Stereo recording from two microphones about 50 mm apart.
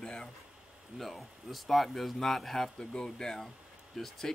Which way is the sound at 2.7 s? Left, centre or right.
Centre.